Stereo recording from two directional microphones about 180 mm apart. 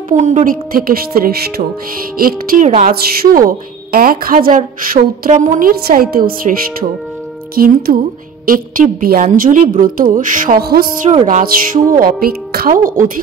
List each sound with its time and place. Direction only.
0.1 s a woman's voice: 40° right (ahead or behind)